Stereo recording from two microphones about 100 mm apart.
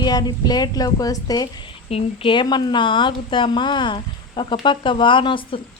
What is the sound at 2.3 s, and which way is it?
Speech, 50° left (ahead or behind).